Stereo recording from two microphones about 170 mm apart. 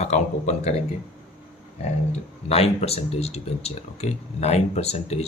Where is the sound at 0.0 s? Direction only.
40° left (ahead or behind).